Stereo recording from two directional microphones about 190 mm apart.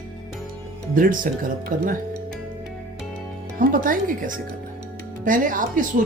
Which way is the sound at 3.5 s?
45° right (ahead or behind).